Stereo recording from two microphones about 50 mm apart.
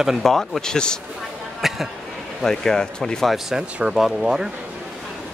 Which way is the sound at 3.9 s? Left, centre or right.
Centre.